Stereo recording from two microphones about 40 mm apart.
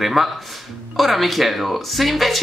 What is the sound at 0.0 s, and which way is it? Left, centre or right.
Speech, centre.